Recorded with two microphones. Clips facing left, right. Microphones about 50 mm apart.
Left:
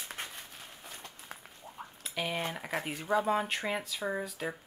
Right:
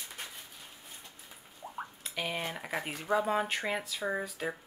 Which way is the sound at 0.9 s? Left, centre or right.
Left.